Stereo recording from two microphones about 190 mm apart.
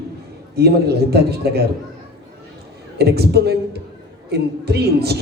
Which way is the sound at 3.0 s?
55° right (ahead or behind).